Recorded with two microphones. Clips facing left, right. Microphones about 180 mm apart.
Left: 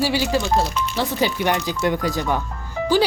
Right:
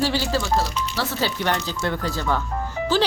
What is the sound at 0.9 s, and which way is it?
Speech, 15° left (ahead or behind).